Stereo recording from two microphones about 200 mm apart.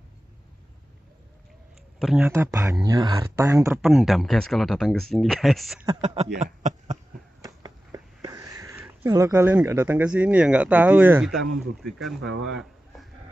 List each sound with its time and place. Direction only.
2.0 s speech: centre (ahead or behind)
2.2 s speech: 15° right (ahead or behind)
3.8 s speech: centre (ahead or behind)
5.9 s speech: 30° right (ahead or behind)
6.4 s a sound: 35° right (ahead or behind)
7.4 s a sound: 20° right (ahead or behind)
11.3 s speech: centre (ahead or behind)
12.2 s speech: 65° right (ahead or behind)